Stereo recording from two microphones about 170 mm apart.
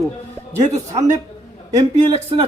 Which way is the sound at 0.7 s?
20° right (ahead or behind).